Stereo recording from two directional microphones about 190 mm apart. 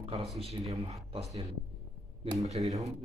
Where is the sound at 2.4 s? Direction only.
35° right (ahead or behind).